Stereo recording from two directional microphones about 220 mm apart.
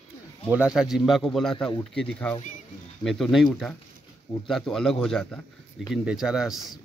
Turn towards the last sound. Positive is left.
turn(degrees=0)  # may be behind; listen again after turning